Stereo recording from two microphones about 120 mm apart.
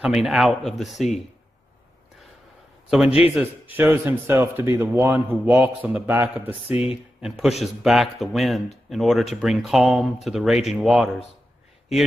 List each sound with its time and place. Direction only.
0.0 s speech: 5° right (ahead or behind)
3.2 s a man's voice: 10° right (ahead or behind)